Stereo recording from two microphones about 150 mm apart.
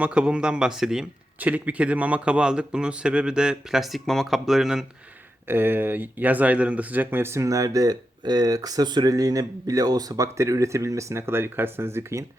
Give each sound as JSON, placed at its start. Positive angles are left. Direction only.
{"t": 0.0, "sound": "speech", "side_deg": -5}
{"t": 5.5, "sound": "speech", "side_deg": -15}